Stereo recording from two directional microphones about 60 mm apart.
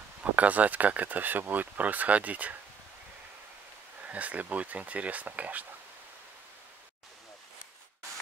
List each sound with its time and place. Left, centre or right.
0.2 s speech: right
4.1 s speech: right